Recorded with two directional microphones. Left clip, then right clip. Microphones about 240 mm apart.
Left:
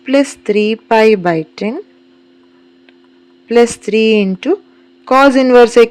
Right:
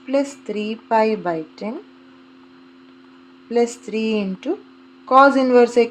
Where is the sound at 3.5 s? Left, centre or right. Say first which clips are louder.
Left 10 dB; left.